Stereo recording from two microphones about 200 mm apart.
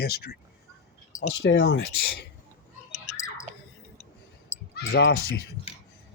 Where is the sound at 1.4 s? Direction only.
60° left (ahead or behind).